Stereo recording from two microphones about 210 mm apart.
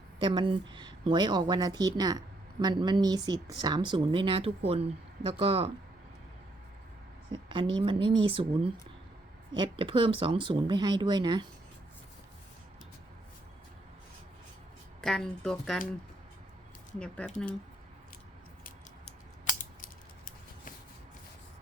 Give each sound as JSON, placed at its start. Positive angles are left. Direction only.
{"t": 0.2, "sound": "a woman's voice", "side_deg": -25}
{"t": 7.3, "sound": "a woman's voice", "side_deg": -25}
{"t": 15.0, "sound": "speech", "side_deg": 5}
{"t": 17.0, "sound": "speech", "side_deg": 5}